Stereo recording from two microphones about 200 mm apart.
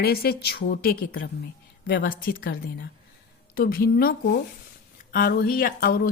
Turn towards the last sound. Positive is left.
turn(degrees=50)  # may be behind; listen again after turning